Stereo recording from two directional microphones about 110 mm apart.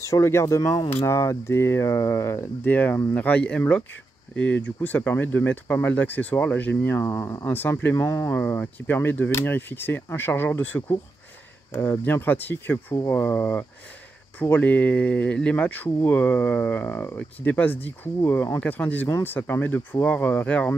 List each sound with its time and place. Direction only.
0.0 s speech: 25° left (ahead or behind)
7.4 s speech: 20° left (ahead or behind)
8.4 s speech: 15° left (ahead or behind)
18.6 s speech: 15° left (ahead or behind)